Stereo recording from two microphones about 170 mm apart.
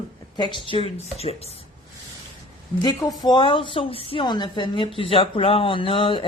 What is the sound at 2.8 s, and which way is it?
A woman's voice, 20° left (ahead or behind).